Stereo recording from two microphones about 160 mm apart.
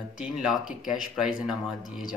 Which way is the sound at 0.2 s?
5° right (ahead or behind).